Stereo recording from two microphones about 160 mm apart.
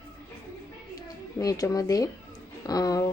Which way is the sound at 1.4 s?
20° left (ahead or behind).